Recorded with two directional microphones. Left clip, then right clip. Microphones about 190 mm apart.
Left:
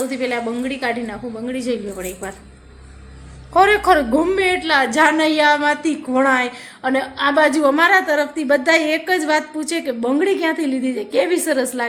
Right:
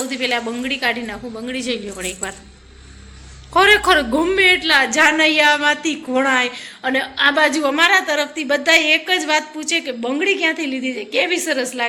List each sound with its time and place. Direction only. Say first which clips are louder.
0.1 s a woman's voice: right 1 dB; 10° left (ahead or behind)
3.5 s a woman's voice: even; 5° left (ahead or behind); by 11.9 s 25° left (ahead or behind)